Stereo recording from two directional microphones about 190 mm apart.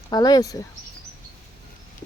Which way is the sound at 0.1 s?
20° left (ahead or behind).